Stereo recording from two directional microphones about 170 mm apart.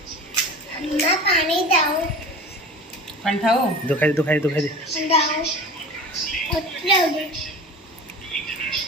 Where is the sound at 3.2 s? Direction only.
Centre (ahead or behind).